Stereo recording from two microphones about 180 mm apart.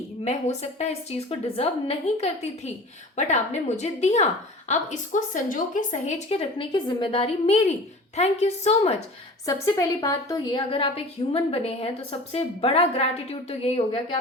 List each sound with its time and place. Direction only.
0.3 s a woman's voice: 40° left (ahead or behind)
9.5 s a woman's voice: 20° left (ahead or behind)